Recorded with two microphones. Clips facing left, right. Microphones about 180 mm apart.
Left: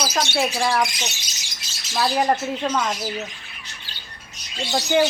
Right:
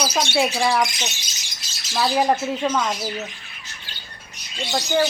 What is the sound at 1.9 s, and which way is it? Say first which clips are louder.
Speech: right 1 dB; centre (ahead or behind).